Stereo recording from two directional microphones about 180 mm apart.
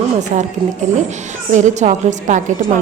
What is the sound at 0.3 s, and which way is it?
A woman's voice, 40° right (ahead or behind).